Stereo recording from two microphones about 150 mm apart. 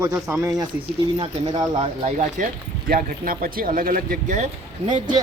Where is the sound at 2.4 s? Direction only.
60° right (ahead or behind).